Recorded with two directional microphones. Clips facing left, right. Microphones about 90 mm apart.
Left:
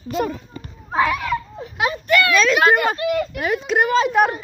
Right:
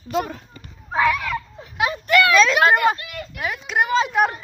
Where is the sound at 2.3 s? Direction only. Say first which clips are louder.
Right 2 dB; 25° right (ahead or behind).